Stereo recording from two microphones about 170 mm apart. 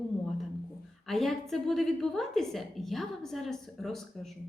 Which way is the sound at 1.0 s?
Centre (ahead or behind).